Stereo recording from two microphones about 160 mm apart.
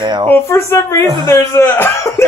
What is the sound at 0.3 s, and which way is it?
Speech, 15° left (ahead or behind).